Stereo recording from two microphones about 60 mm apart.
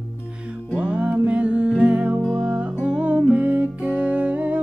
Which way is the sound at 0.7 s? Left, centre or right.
Centre.